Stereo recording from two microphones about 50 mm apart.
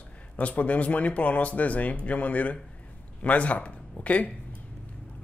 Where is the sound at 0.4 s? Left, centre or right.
Left.